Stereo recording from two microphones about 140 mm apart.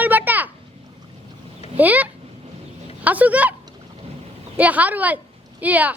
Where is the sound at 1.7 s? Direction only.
10° right (ahead or behind).